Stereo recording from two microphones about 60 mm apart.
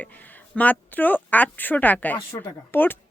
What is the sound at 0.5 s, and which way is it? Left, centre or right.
A woman's voice, left.